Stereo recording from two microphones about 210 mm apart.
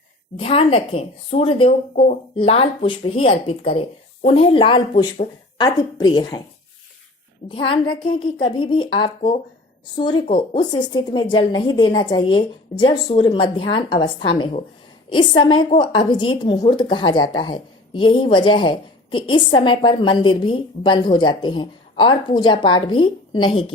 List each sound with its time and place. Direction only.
0.3 s a woman's voice: 25° left (ahead or behind)
7.4 s a woman's voice: 25° left (ahead or behind)